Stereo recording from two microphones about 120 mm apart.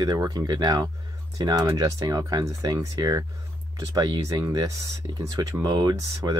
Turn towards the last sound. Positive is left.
turn(degrees=-30)  # may be behind; listen again after turning